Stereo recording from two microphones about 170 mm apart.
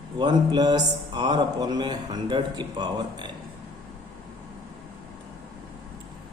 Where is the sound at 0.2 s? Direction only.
25° right (ahead or behind).